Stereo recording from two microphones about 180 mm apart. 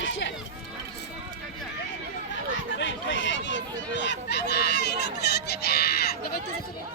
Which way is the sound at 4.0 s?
75° left (ahead or behind).